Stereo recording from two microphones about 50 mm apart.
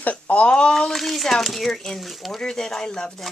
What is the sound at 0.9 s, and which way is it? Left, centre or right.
Speech, centre.